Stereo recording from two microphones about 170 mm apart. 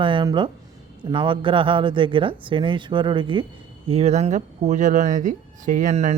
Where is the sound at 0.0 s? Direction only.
30° right (ahead or behind).